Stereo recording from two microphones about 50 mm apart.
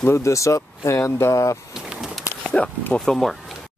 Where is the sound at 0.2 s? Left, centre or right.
Left.